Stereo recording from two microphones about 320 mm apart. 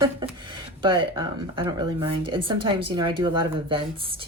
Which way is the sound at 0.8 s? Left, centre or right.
Centre.